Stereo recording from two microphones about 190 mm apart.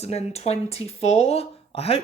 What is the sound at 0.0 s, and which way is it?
Speech, 35° left (ahead or behind).